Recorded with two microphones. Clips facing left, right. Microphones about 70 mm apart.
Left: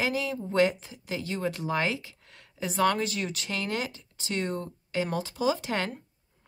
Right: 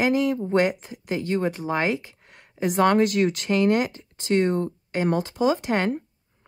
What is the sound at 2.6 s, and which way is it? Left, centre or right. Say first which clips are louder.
Speech: right 7 dB; right.